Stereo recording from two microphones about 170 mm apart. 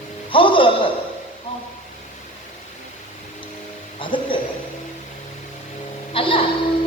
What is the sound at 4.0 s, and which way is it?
Music, 30° left (ahead or behind).